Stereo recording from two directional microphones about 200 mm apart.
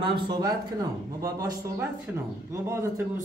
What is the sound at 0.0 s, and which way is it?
Speech, 20° right (ahead or behind).